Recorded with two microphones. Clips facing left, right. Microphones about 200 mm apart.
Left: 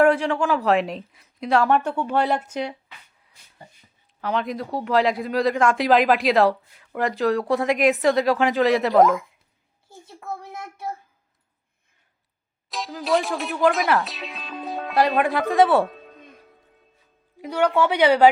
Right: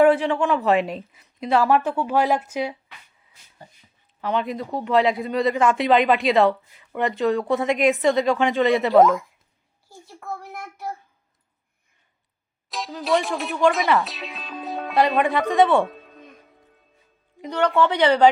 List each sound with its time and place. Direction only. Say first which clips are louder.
0.0 s speech: right 1 dB; centre (ahead or behind)
4.2 s speech: right 1 dB; centre (ahead or behind)
10.5 s child singing: even; 25° left (ahead or behind)
12.7 s speech: even; centre (ahead or behind)
17.4 s speech: even; 10° left (ahead or behind)